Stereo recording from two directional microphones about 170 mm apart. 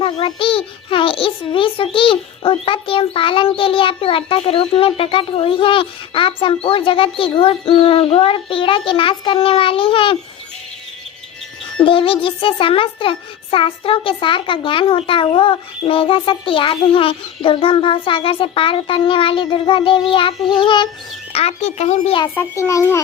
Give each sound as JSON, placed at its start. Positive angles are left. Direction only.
{"t": 0.0, "sound": "a child's voice", "side_deg": 30}
{"t": 11.9, "sound": "a child's voice", "side_deg": 30}
{"t": 21.3, "sound": "a child's voice", "side_deg": 40}
{"t": 22.4, "sound": "a child's voice", "side_deg": 15}